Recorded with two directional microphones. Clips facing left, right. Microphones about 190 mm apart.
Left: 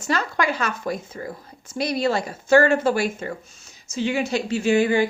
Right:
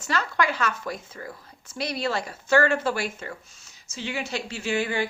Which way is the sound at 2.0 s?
45° left (ahead or behind).